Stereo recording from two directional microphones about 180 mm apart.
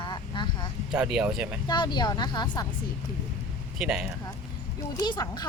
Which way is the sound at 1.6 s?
25° left (ahead or behind).